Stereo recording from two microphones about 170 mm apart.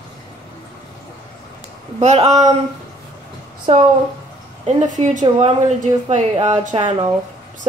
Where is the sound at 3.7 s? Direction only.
35° right (ahead or behind).